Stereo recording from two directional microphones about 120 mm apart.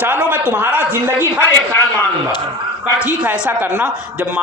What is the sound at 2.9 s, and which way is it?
Speech, 10° right (ahead or behind).